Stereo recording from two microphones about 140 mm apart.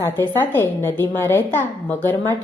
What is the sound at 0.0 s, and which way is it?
A woman's voice, 15° left (ahead or behind).